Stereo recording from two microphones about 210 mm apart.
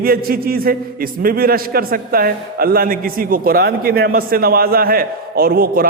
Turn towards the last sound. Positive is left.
turn(degrees=-45)  # may be behind; listen again after turning